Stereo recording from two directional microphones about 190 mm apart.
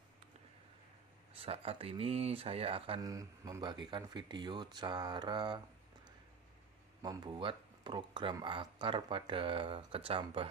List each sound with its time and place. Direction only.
1.3 s speech: 30° right (ahead or behind)
7.0 s speech: 20° right (ahead or behind)